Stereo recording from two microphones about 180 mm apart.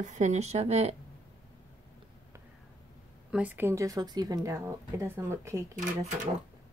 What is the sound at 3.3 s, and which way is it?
A woman's voice, 10° right (ahead or behind).